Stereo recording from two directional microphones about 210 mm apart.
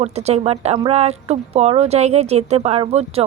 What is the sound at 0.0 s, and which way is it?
Speech, 30° right (ahead or behind).